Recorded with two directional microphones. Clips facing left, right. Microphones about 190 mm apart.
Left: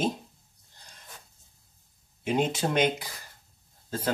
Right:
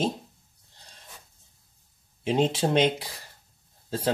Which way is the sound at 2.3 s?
30° right (ahead or behind).